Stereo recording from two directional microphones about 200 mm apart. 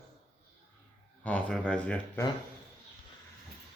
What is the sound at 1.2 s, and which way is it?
Speech, 5° left (ahead or behind).